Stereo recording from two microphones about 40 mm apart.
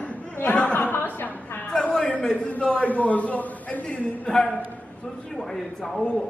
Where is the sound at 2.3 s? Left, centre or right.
Left.